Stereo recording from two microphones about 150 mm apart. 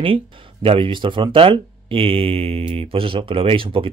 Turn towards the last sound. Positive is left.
turn(degrees=-35)  # may be behind; listen again after turning